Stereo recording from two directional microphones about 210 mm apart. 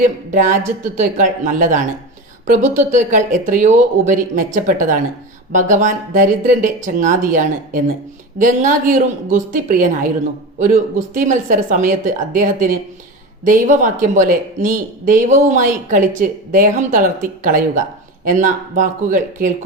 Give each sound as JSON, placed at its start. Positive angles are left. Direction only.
{"t": 0.0, "sound": "speech", "side_deg": -35}